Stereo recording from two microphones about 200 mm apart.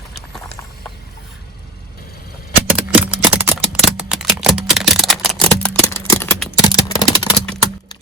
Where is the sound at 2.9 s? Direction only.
5° right (ahead or behind); by 7.4 s 25° left (ahead or behind).